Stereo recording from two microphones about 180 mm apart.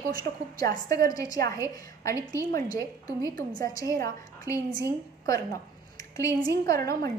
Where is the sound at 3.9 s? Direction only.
15° left (ahead or behind).